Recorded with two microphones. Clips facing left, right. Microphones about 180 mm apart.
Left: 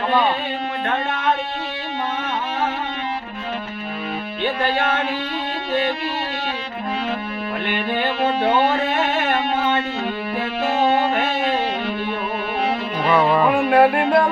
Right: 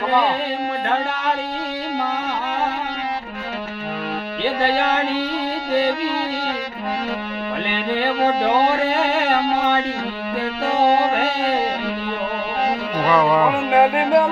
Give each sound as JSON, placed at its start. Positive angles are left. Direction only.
{"t": 13.1, "sound": "music", "side_deg": 10}
{"t": 13.3, "sound": "music", "side_deg": -10}